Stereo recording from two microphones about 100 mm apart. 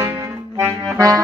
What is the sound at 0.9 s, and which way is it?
Accordion, 35° right (ahead or behind).